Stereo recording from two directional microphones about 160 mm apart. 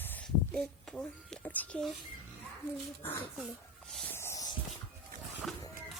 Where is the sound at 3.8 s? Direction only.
5° left (ahead or behind).